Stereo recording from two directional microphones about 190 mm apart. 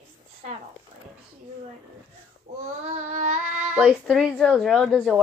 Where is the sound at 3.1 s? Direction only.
35° right (ahead or behind).